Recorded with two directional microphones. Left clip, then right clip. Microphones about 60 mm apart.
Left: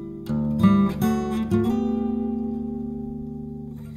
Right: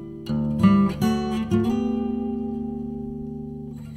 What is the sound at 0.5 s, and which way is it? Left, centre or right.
Music, right.